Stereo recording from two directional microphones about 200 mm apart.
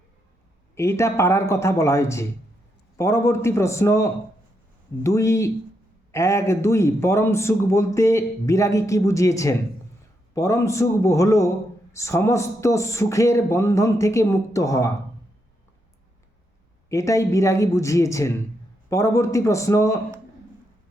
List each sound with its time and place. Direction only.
0.8 s a man's voice: 15° left (ahead or behind)
16.9 s a man's voice: 15° left (ahead or behind)